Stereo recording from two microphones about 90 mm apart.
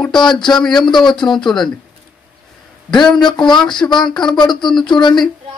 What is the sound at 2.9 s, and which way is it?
Speech, 5° left (ahead or behind).